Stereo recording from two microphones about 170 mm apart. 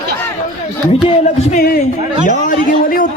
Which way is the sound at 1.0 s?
40° left (ahead or behind).